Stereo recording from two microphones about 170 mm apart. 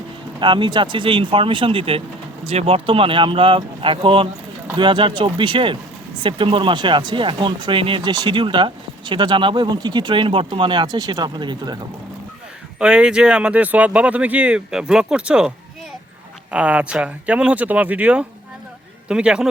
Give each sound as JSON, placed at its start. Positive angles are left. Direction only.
{"t": 0.3, "sound": "speech", "side_deg": -30}
{"t": 12.8, "sound": "a man's voice", "side_deg": -5}